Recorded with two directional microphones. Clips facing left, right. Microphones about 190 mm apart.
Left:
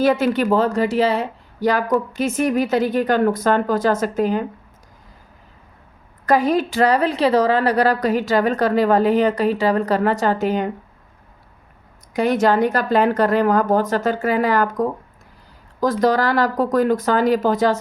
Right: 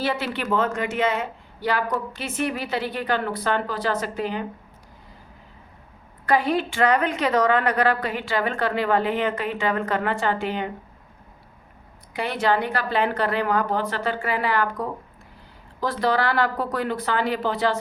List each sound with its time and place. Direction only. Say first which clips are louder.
0.0 s speech: left 9 dB; 45° left (ahead or behind)
0.3 s speech: left 7 dB; 35° left (ahead or behind)
6.2 s a woman's voice: left 5 dB; 40° left (ahead or behind)
12.1 s speech: left 6 dB; 45° left (ahead or behind)